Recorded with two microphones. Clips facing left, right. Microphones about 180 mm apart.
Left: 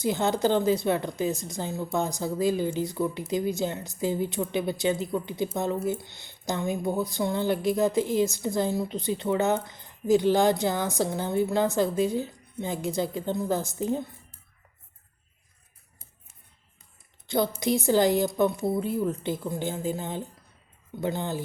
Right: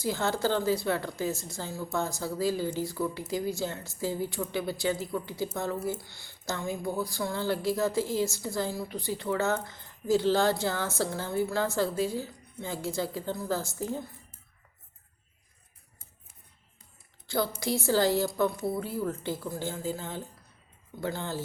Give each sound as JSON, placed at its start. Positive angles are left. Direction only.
{"t": 0.0, "sound": "speech", "side_deg": 20}
{"t": 17.2, "sound": "a woman's voice", "side_deg": 20}